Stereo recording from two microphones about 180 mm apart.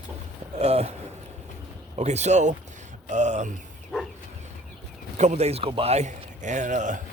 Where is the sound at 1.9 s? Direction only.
40° right (ahead or behind).